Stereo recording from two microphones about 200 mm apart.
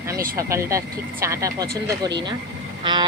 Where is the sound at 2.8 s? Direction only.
20° right (ahead or behind).